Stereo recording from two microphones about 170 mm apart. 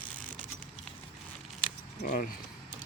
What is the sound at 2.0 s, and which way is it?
Speech, 55° left (ahead or behind).